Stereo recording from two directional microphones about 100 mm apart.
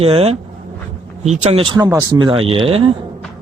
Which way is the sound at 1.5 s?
75° right (ahead or behind).